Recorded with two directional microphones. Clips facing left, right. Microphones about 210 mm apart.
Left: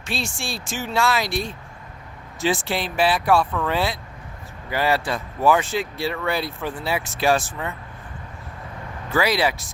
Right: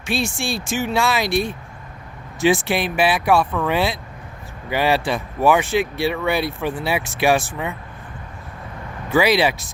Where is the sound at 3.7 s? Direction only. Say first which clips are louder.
Right 3 dB; 25° right (ahead or behind).